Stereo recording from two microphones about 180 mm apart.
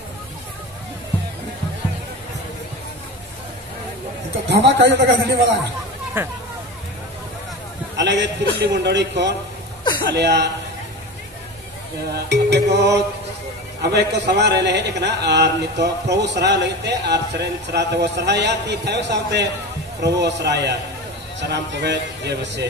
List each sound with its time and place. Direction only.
4.5 s a man's voice: 70° right (ahead or behind)
6.2 s speech: 10° right (ahead or behind)
7.9 s a man's voice: 80° right
12.1 s a man's voice: 70° right (ahead or behind)